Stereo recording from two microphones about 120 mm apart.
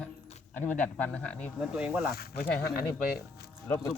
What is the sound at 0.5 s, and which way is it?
Speech, 15° left (ahead or behind).